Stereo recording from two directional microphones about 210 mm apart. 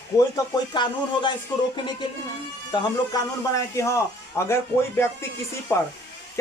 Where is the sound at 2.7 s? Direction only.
15° left (ahead or behind).